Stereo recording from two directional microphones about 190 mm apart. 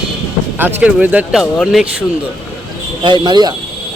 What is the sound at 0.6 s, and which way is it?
Speech, 10° right (ahead or behind).